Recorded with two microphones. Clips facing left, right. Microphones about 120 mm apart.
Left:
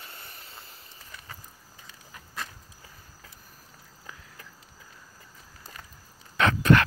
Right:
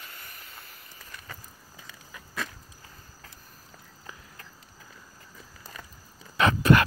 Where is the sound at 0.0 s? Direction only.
30° left (ahead or behind).